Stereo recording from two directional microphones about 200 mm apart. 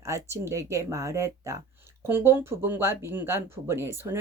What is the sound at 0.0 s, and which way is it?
Speech, 15° right (ahead or behind).